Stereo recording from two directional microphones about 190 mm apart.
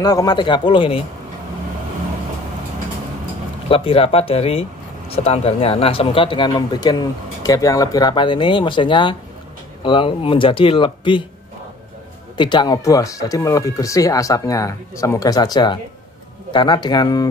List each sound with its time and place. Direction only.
0.0 s speech: 20° left (ahead or behind)
3.6 s speech: 30° left (ahead or behind)
12.4 s speech: 25° left (ahead or behind)